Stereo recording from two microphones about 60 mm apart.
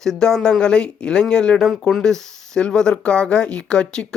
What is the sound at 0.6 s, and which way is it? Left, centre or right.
Speech, centre.